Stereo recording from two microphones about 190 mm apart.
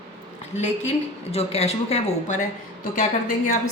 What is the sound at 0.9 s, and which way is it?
A woman's voice, 35° left (ahead or behind).